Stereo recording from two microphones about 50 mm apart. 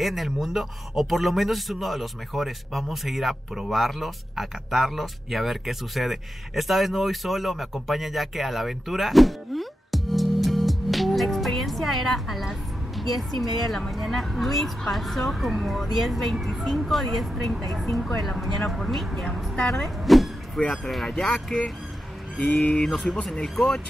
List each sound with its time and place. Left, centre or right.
0.0 s a woman's voice: centre
22.6 s speech: centre